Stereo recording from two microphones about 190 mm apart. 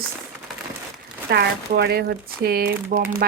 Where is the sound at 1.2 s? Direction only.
55° right (ahead or behind).